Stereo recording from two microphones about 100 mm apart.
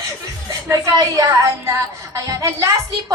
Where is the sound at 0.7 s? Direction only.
35° right (ahead or behind).